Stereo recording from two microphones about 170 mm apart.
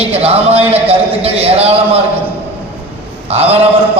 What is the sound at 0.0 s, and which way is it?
A man's voice, 35° right (ahead or behind).